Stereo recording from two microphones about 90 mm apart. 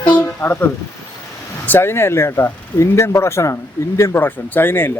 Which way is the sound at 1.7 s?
25° left (ahead or behind).